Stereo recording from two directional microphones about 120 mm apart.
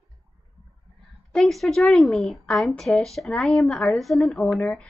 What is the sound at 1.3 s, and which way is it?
Speech, centre (ahead or behind).